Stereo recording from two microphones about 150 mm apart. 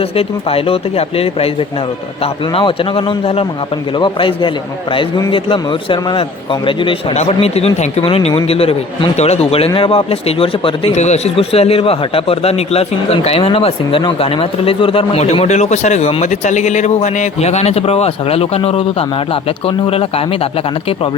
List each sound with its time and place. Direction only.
0.0 s a man's voice: 40° left (ahead or behind)